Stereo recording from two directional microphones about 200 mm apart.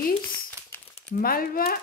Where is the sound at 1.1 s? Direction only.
45° left (ahead or behind).